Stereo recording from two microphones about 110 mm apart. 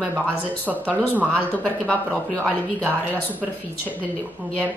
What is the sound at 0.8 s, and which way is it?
Speech, 15° left (ahead or behind).